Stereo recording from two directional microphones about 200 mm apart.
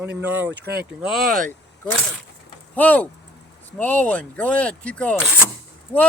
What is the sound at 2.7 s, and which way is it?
Speech, 10° left (ahead or behind).